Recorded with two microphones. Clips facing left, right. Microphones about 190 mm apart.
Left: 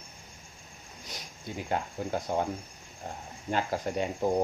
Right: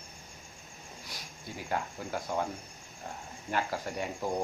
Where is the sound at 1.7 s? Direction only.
25° left (ahead or behind).